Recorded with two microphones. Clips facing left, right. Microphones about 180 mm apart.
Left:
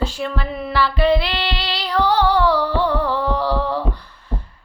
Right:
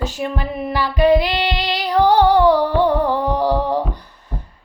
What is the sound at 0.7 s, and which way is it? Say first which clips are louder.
Speech: right 3 dB; 15° right (ahead or behind).